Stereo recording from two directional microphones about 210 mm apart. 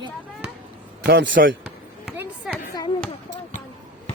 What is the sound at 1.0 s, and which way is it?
Speech, 55° right (ahead or behind).